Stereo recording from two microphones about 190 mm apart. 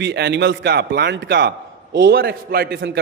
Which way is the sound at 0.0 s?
65° right (ahead or behind).